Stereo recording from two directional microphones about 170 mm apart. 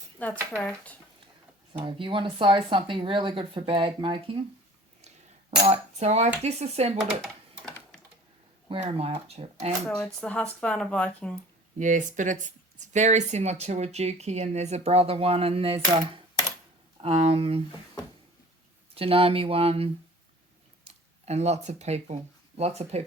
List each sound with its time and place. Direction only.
0.2 s speech: 10° left (ahead or behind)
1.8 s speech: 30° right (ahead or behind)
5.0 s cutlery: 40° right (ahead or behind)
6.4 s speech: 40° right (ahead or behind)
8.9 s speech: 30° right (ahead or behind)
9.8 s speech: 5° left (ahead or behind)
11.8 s speech: 50° right (ahead or behind)
18.9 s speech: 35° right (ahead or behind)